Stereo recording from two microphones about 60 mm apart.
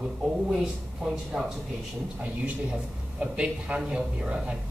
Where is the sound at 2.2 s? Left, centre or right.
Right.